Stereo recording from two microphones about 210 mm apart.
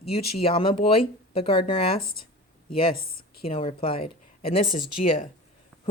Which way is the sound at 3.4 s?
30° left (ahead or behind).